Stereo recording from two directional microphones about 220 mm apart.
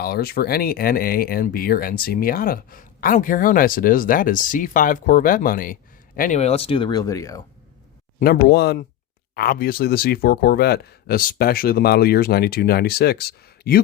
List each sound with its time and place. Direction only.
0.0 s speech: 45° left (ahead or behind); by 7.4 s 15° left (ahead or behind)
8.2 s speech: 45° left (ahead or behind)